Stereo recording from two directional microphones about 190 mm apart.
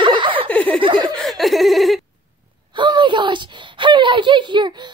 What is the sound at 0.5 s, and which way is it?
Giggle, 5° left (ahead or behind).